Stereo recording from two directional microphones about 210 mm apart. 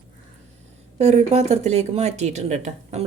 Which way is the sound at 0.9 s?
30° right (ahead or behind).